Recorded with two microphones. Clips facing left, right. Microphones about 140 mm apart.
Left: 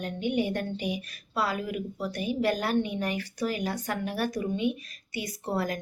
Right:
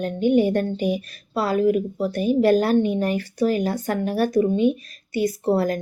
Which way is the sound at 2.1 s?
45° right (ahead or behind).